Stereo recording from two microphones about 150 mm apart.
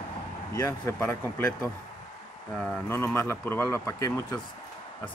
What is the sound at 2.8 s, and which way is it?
Speech, 15° left (ahead or behind).